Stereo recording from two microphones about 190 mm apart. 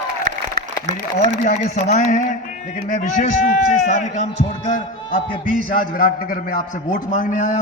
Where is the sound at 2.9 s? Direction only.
45° left (ahead or behind).